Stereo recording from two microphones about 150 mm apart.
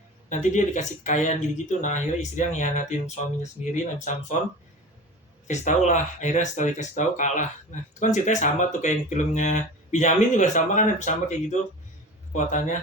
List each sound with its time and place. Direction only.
0.3 s speech: 55° left (ahead or behind)
5.5 s speech: 55° left (ahead or behind)